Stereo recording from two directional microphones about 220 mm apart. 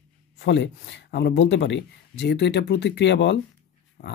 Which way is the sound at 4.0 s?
50° left (ahead or behind).